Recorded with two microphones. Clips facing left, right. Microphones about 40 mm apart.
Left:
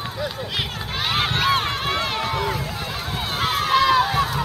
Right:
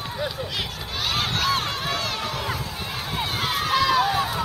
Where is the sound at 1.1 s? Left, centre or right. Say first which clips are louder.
Left 4 dB; left.